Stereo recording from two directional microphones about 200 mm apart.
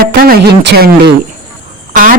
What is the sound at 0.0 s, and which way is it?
Speech, 45° right (ahead or behind).